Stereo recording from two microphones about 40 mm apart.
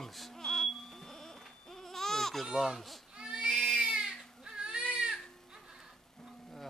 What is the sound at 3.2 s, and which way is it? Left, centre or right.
Baby cry, right.